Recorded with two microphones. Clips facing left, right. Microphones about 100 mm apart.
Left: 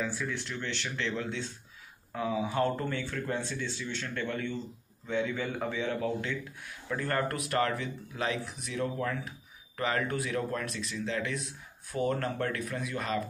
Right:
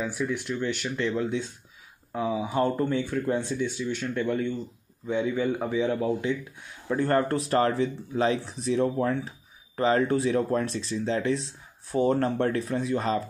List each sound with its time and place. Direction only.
0.0 s a man's voice: 15° right (ahead or behind); by 13.2 s 30° right (ahead or behind)